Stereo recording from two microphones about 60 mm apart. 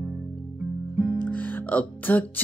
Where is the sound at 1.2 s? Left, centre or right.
Left.